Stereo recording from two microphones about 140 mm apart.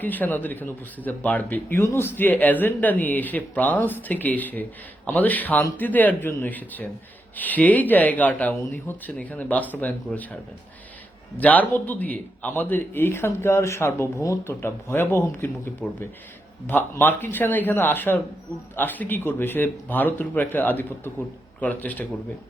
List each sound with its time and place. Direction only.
0.0 s a man's voice: 10° left (ahead or behind)
11.3 s a man's voice: 10° left (ahead or behind)